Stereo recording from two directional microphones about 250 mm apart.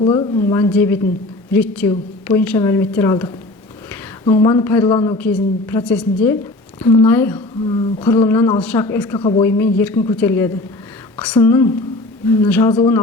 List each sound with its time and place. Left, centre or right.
0.0 s a woman's voice: centre
9.1 s a woman's voice: left
9.4 s speech: centre